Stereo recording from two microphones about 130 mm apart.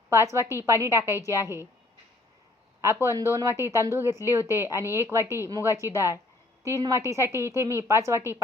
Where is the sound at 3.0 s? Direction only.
20° right (ahead or behind).